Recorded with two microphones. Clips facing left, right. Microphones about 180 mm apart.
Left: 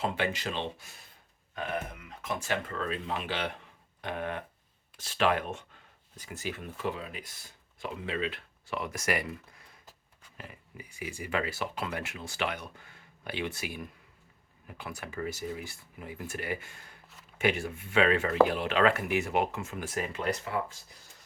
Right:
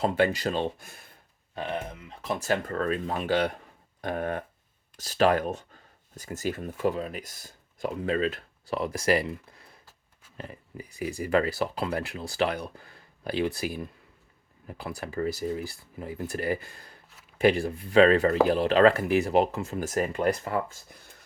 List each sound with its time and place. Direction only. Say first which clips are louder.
0.0 s speech: right 7 dB; 40° right (ahead or behind)
1.5 s speech: right 2 dB; 30° right (ahead or behind)